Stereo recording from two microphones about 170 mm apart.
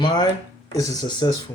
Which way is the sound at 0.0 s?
25° left (ahead or behind).